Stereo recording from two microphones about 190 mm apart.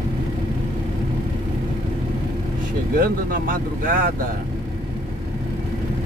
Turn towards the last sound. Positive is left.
turn(degrees=-45)  # may be behind; listen again after turning